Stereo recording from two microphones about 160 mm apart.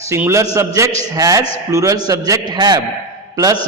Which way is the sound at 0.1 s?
15° right (ahead or behind).